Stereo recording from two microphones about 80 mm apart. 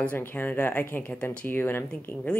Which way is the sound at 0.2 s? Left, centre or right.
Left.